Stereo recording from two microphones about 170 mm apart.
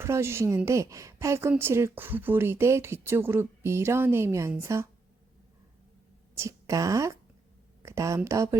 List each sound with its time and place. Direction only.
0.0 s speech: 15° right (ahead or behind)
6.3 s speech: 20° right (ahead or behind)